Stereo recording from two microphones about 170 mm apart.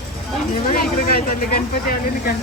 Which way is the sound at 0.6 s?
60° left (ahead or behind).